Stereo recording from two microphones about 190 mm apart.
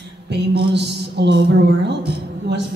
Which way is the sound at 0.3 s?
60° right (ahead or behind).